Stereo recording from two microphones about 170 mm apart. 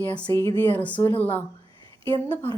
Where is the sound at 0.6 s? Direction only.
10° left (ahead or behind).